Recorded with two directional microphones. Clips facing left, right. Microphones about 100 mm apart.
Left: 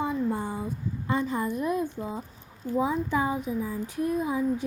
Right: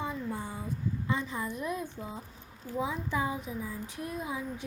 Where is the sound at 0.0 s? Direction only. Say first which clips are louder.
Left 8 dB; 55° left (ahead or behind).